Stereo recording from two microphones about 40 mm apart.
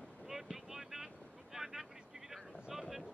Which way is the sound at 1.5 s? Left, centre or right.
Centre.